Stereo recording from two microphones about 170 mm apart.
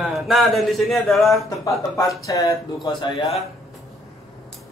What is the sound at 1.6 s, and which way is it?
A man's voice, 20° left (ahead or behind).